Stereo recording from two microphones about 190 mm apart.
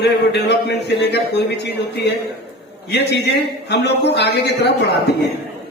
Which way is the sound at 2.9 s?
60° left (ahead or behind).